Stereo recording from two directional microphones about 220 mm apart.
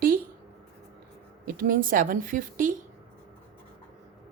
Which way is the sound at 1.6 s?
40° right (ahead or behind).